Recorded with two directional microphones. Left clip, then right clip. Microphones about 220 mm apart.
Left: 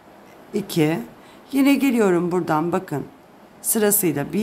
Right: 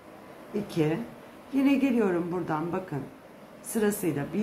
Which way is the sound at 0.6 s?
50° left (ahead or behind).